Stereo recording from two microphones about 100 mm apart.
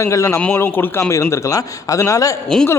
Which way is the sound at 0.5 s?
20° left (ahead or behind).